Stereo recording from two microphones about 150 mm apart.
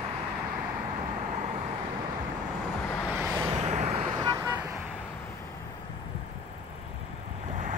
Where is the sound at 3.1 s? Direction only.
15° right (ahead or behind).